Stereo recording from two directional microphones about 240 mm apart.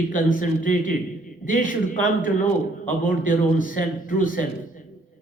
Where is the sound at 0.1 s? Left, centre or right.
Left.